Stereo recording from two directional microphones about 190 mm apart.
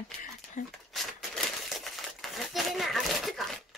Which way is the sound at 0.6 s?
45° left (ahead or behind).